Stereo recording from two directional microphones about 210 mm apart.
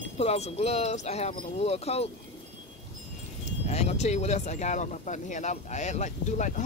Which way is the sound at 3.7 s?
30° left (ahead or behind).